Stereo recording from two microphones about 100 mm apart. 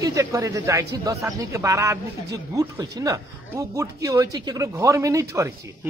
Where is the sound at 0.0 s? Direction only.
35° right (ahead or behind).